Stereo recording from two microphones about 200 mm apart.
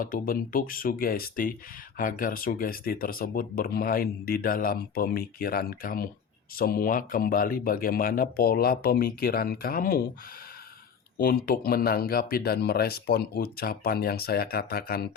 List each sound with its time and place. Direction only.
0.0 s speech: 45° left (ahead or behind)
11.2 s speech: 45° left (ahead or behind)